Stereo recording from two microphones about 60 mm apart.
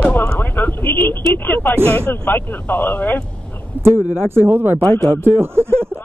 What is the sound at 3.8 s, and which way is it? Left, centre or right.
Speech, right.